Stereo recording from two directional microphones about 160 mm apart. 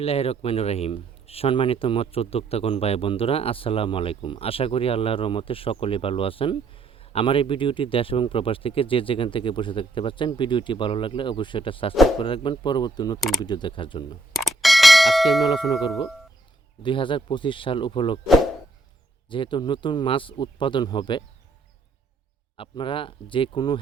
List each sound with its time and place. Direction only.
0.0 s speech: 40° left (ahead or behind)
14.3 s bell: centre (ahead or behind)
16.8 s speech: 30° left (ahead or behind)
19.3 s speech: 30° left (ahead or behind)
22.5 s speech: 30° left (ahead or behind)